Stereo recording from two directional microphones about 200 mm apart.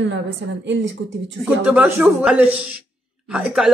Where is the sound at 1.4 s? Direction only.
5° right (ahead or behind).